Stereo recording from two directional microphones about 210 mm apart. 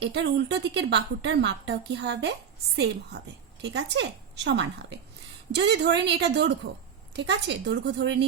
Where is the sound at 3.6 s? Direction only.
55° right (ahead or behind).